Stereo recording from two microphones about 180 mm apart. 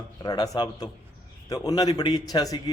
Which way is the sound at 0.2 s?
20° left (ahead or behind).